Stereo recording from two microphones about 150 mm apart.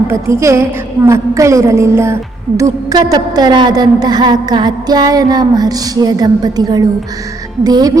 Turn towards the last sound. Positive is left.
turn(degrees=-25)  # may be behind; listen again after turning